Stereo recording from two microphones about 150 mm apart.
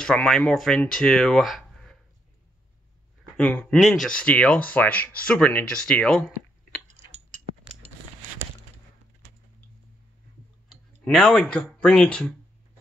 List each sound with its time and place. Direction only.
0.0 s speech: 5° left (ahead or behind)
3.3 s speech: 10° left (ahead or behind)
7.1 s a sound: 50° right (ahead or behind)
10.7 s speech: 5° left (ahead or behind)